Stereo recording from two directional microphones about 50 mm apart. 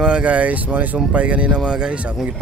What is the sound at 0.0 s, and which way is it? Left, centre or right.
Speech, right.